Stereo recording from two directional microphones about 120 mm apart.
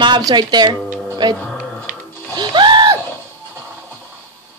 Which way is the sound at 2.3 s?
40° right (ahead or behind).